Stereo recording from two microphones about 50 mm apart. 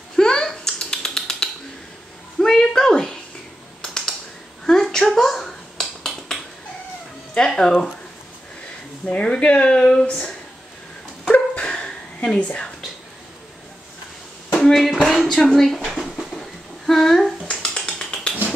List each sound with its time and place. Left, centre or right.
0.1 s a sound: centre
3.8 s computer keyboard: centre
4.6 s finger snapping: centre
7.3 s speech: centre
9.2 s speech: centre
11.5 s a sound: centre
14.5 s speech: centre
15.9 s a sound: centre
17.5 s finger snapping: centre